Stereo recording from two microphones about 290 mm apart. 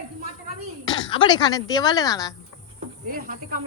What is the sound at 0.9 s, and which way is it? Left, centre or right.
Speech, centre.